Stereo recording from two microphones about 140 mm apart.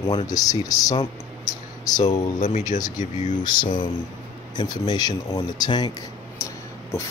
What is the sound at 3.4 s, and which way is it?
Speech, 30° left (ahead or behind).